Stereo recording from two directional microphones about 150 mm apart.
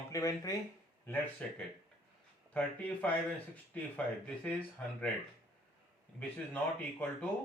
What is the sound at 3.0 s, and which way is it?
Speech, 10° left (ahead or behind).